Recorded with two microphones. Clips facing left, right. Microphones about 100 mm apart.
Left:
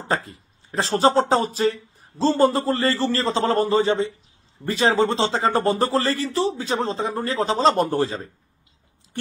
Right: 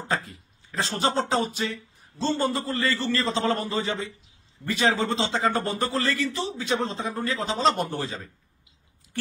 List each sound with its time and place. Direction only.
0.1 s speech: 30° left (ahead or behind)